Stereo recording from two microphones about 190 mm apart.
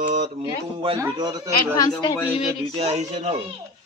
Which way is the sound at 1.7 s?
20° left (ahead or behind).